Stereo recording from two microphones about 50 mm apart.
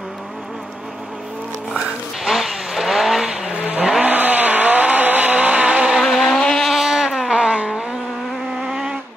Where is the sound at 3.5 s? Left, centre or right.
Right.